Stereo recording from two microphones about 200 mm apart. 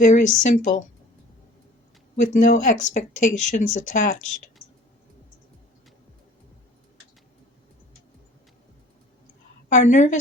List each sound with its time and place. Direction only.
0.0 s speech: 40° left (ahead or behind)
2.1 s speech: 35° left (ahead or behind)
9.6 s speech: 40° left (ahead or behind)